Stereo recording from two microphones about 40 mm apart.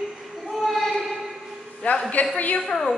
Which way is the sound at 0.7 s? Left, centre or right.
Centre.